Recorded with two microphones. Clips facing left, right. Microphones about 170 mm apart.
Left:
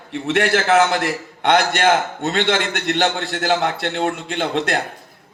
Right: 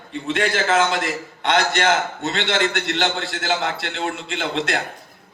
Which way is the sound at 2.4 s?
55° left (ahead or behind).